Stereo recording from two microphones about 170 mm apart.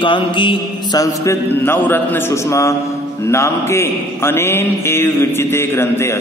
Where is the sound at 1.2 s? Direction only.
15° left (ahead or behind).